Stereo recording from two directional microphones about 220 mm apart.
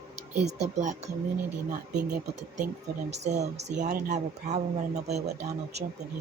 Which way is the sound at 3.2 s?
30° right (ahead or behind).